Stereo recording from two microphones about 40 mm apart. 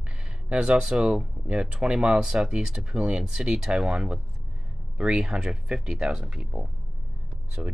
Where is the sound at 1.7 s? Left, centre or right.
Right.